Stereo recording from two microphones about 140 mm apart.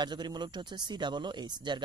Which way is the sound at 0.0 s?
30° right (ahead or behind).